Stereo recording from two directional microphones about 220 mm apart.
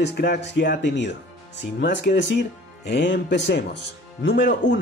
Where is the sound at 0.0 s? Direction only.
50° left (ahead or behind).